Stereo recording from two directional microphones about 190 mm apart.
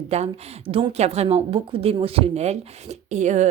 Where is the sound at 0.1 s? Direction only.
35° right (ahead or behind).